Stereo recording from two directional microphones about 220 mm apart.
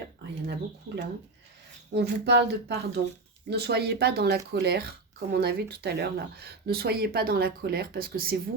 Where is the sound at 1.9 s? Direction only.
50° right (ahead or behind).